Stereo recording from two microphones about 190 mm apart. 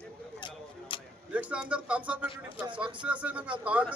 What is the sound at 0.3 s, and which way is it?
Tick-tock, 25° left (ahead or behind).